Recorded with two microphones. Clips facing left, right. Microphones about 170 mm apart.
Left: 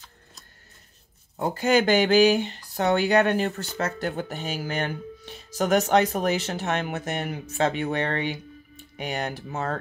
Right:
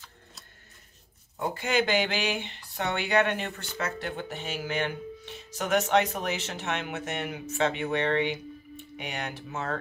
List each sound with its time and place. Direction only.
1.4 s speech: 40° left (ahead or behind)